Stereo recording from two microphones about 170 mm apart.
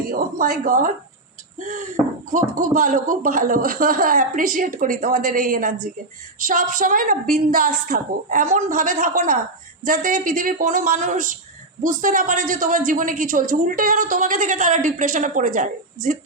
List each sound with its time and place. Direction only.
0.0 s speech: 55° right (ahead or behind)